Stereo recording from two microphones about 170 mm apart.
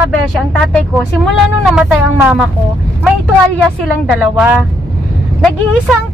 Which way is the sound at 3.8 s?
5° right (ahead or behind).